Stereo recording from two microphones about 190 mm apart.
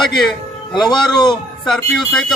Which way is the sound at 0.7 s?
25° left (ahead or behind).